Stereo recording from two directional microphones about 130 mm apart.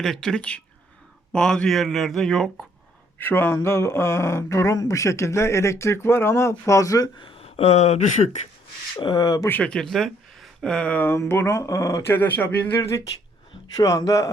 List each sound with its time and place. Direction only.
0.0 s speech: 5° left (ahead or behind)
3.2 s speech: 15° left (ahead or behind)
7.2 s speech: 45° left (ahead or behind); by 8.4 s 65° left (ahead or behind)
9.0 s speech: 35° left (ahead or behind)
9.5 s speech: 10° left (ahead or behind); by 14.3 s 25° left (ahead or behind)